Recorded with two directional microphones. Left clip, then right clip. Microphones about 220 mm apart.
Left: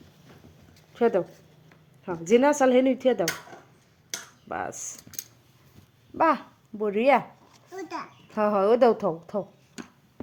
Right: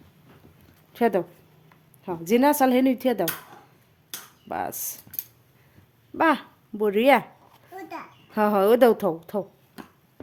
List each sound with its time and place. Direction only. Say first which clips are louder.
0.9 s speech: even; 25° right (ahead or behind)
2.3 s speech: even; 15° right (ahead or behind)
4.4 s speech: right 3 dB; 20° right (ahead or behind)
6.1 s a child's voice: right 1 dB; 15° right (ahead or behind)